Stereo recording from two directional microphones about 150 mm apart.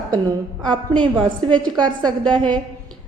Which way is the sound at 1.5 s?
30° right (ahead or behind).